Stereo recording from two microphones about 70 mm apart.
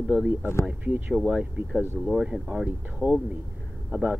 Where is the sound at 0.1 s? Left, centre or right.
Centre.